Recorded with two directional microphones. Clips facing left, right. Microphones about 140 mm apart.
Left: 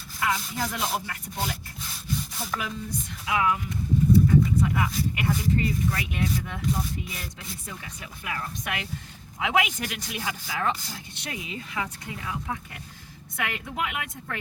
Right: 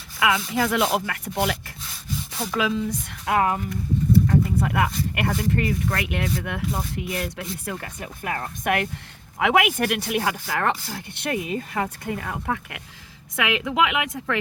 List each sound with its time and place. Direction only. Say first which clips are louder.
0.2 s speech: right 6 dB; 90° right
2.6 s speech: right 13 dB; 90° right
3.2 s speech: right 4 dB; 50° right (ahead or behind)
4.3 s speech: even; 60° right (ahead or behind)
13.3 s speech: right 8 dB; 90° right